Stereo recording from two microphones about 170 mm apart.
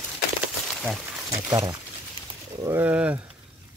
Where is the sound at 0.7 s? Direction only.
Centre (ahead or behind).